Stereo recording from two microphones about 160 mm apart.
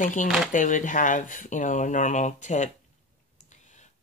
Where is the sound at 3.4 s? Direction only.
50° left (ahead or behind).